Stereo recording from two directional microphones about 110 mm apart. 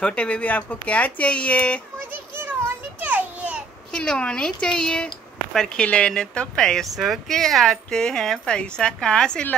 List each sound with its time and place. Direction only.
0.0 s speech: 10° left (ahead or behind)
2.0 s children playing: 20° right (ahead or behind)
3.0 s a sound: 15° right (ahead or behind)
3.9 s speech: 5° left (ahead or behind)